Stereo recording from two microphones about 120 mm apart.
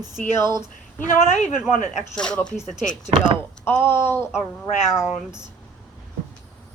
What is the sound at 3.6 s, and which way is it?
Speech, 20° left (ahead or behind).